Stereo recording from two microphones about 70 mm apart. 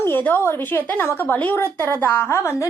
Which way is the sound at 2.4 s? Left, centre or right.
Left.